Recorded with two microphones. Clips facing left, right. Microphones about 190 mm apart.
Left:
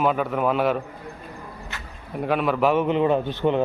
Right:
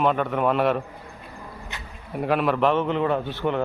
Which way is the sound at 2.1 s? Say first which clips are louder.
Even; centre (ahead or behind).